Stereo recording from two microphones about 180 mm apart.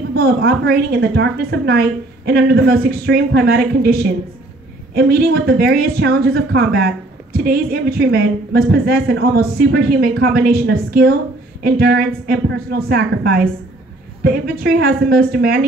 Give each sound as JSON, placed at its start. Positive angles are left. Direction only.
{"t": 0.1, "sound": "a woman's voice", "side_deg": -60}